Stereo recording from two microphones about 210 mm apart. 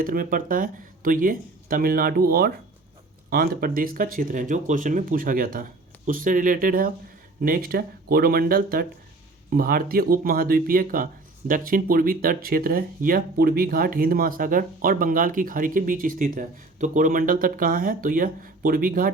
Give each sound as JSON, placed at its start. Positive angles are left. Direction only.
{"t": 0.0, "sound": "speech", "side_deg": -40}